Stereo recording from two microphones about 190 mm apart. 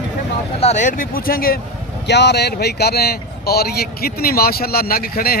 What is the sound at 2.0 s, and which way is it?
A man's voice, 65° left (ahead or behind).